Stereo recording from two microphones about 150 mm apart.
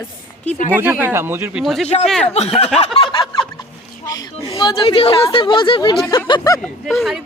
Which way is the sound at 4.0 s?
25° left (ahead or behind).